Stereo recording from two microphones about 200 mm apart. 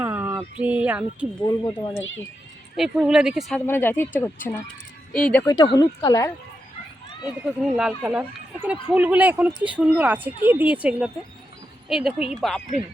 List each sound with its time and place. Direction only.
0.0 s a sound: 10° right (ahead or behind)
2.7 s speech: centre (ahead or behind)
3.7 s speech: 10° left (ahead or behind)
7.4 s speech: 5° right (ahead or behind)